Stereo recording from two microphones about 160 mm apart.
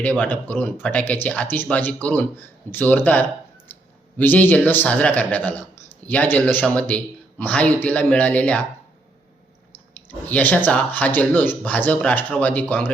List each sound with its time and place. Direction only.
0.0 s a man's voice: 10° left (ahead or behind)
10.1 s a man's voice: 10° left (ahead or behind)